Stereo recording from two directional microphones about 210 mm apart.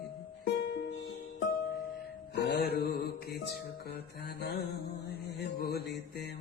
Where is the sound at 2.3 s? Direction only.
55° left (ahead or behind).